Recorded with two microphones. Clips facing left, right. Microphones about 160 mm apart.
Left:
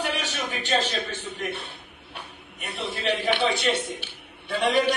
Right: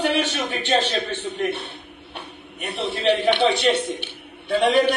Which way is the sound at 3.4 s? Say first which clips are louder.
Right 5 dB; 25° right (ahead or behind).